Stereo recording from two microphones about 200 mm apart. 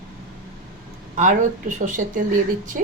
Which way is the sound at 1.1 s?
35° right (ahead or behind).